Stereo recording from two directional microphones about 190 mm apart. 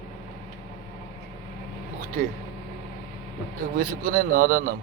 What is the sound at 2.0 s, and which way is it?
Speech, 45° right (ahead or behind).